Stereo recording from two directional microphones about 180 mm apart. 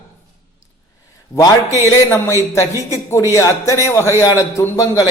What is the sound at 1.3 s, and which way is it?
A man's voice, 15° left (ahead or behind).